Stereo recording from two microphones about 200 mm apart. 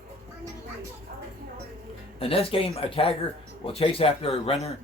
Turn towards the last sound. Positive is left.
turn(degrees=30)  # may be behind; listen again after turning